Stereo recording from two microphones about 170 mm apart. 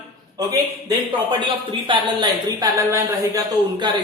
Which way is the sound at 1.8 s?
25° right (ahead or behind).